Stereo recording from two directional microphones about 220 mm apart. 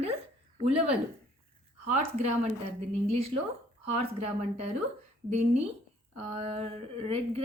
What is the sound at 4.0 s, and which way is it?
A woman's voice, 30° right (ahead or behind).